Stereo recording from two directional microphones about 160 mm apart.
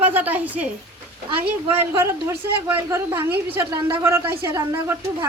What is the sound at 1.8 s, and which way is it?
A woman's voice, 15° right (ahead or behind).